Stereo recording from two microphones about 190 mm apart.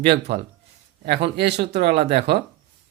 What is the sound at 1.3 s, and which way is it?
Speech, 60° right (ahead or behind).